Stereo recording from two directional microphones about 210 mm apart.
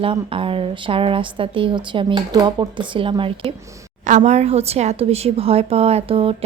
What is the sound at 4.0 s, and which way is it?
Speech, 35° right (ahead or behind).